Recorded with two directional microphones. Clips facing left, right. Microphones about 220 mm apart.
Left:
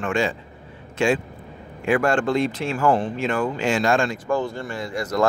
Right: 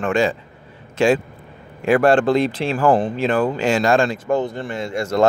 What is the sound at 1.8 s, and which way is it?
Speech, 35° right (ahead or behind).